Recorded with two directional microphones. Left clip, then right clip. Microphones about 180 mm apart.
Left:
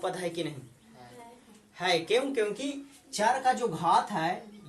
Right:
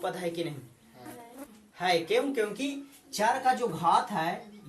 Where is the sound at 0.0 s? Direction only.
25° left (ahead or behind).